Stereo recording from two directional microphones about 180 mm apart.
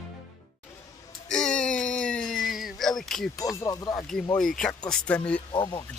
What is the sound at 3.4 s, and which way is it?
Speech, 20° left (ahead or behind).